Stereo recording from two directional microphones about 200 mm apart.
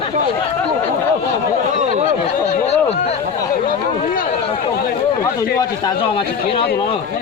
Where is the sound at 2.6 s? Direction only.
30° left (ahead or behind).